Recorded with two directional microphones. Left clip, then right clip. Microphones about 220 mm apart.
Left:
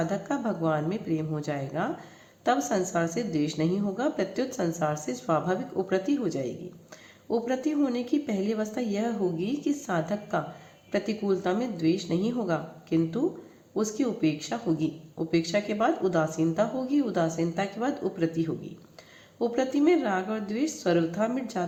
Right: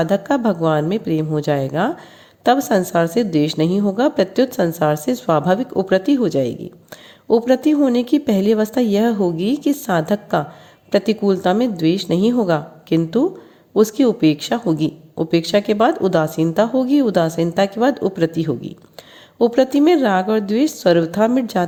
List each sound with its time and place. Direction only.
0.0 s speech: 40° right (ahead or behind)